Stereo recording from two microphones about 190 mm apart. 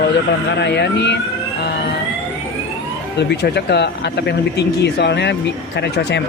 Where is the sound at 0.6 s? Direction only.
65° left (ahead or behind).